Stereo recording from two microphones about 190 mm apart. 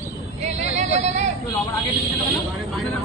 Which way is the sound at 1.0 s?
35° right (ahead or behind).